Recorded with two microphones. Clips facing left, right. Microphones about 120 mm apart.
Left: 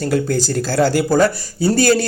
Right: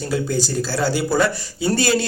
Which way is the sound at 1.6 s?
40° left (ahead or behind).